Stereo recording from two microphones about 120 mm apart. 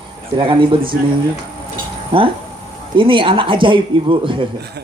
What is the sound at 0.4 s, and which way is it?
Speech, 45° right (ahead or behind).